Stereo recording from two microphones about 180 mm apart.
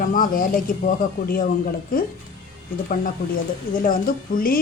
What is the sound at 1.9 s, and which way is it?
Speech, 50° left (ahead or behind).